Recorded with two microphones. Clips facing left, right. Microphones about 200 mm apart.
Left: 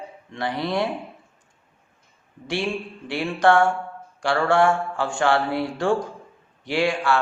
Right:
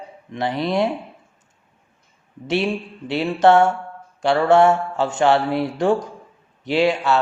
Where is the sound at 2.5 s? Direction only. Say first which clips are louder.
Right 5 dB; 20° right (ahead or behind).